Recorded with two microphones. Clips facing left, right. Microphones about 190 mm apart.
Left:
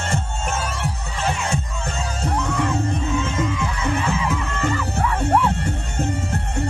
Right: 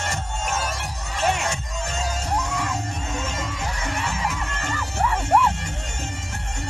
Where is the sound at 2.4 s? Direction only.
55° left (ahead or behind).